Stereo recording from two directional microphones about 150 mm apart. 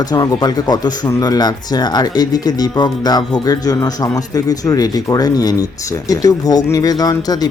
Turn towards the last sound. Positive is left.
turn(degrees=25)  # may be behind; listen again after turning